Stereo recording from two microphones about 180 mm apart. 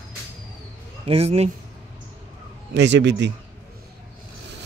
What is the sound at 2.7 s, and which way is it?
Speech, 75° right (ahead or behind).